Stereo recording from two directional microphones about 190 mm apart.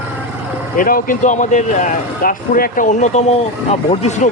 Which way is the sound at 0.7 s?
45° left (ahead or behind).